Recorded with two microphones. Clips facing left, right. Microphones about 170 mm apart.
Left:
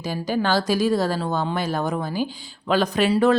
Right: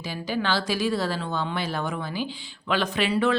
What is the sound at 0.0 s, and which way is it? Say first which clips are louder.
A woman's voice: left 5 dB; 45° left (ahead or behind).